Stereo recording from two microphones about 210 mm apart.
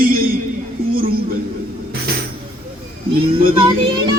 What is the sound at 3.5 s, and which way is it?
Speech, 25° right (ahead or behind).